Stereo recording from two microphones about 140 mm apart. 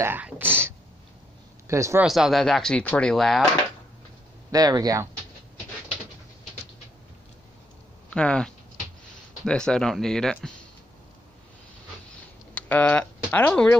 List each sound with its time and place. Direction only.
0.0 s speech: 15° right (ahead or behind)
2.0 s speech: centre (ahead or behind)
4.5 s speech: 25° right (ahead or behind)
8.1 s speech: 5° left (ahead or behind)
12.5 s speech: 10° left (ahead or behind)